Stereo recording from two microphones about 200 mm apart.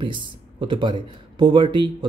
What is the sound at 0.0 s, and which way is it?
Speech, 25° right (ahead or behind).